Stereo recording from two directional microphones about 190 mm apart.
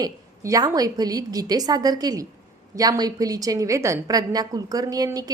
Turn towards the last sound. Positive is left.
turn(degrees=-20)  # may be behind; listen again after turning